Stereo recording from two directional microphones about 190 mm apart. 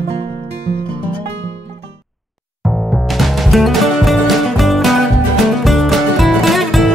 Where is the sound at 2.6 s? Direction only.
Centre (ahead or behind).